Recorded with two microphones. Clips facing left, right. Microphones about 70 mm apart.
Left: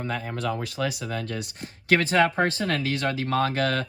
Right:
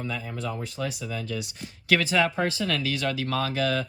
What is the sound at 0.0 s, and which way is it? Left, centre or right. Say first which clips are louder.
Speech: left 3 dB; left.